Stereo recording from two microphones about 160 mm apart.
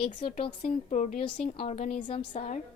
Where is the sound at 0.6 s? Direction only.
50° left (ahead or behind).